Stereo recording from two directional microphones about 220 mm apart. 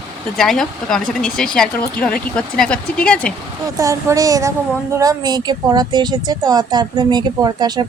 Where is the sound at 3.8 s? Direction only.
15° right (ahead or behind).